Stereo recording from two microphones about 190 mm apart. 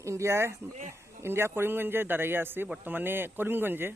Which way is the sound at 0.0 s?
15° right (ahead or behind).